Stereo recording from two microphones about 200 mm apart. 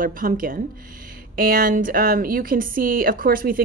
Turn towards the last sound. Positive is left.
turn(degrees=-45)  # may be behind; listen again after turning